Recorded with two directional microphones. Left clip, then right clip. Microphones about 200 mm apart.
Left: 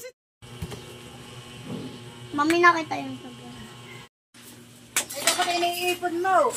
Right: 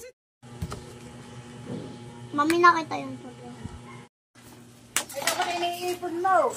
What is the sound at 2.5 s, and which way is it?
Speech, 40° left (ahead or behind).